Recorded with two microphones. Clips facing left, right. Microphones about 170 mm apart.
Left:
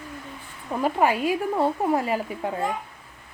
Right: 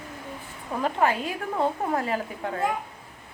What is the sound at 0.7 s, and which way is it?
A woman's voice, 10° left (ahead or behind).